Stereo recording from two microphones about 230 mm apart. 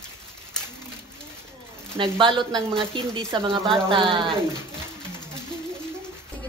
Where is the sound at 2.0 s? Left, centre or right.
Right.